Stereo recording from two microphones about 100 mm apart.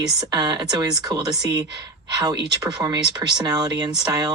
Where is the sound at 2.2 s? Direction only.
40° right (ahead or behind).